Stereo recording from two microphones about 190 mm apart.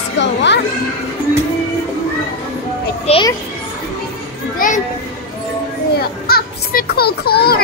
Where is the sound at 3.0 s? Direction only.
30° left (ahead or behind).